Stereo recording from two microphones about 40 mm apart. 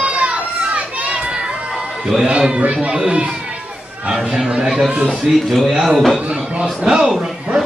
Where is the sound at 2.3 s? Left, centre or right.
Right.